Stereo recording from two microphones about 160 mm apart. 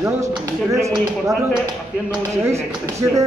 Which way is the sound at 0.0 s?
20° right (ahead or behind).